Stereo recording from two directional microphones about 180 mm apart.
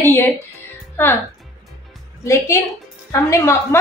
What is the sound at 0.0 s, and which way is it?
A woman's voice, 10° left (ahead or behind).